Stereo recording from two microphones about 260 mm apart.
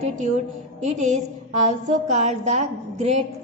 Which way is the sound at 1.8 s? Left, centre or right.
Right.